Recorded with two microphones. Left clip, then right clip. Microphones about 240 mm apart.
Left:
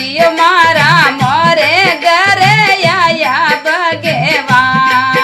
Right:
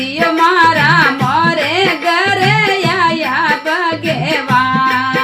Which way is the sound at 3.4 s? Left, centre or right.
Left.